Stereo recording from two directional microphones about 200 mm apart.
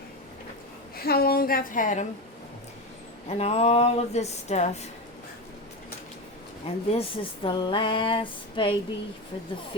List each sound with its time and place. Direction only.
0.9 s a woman's voice: 50° left (ahead or behind)
3.2 s speech: 30° left (ahead or behind)
6.7 s speech: 25° left (ahead or behind)